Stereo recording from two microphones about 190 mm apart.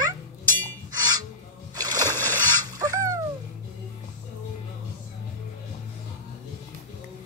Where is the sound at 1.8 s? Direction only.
20° right (ahead or behind).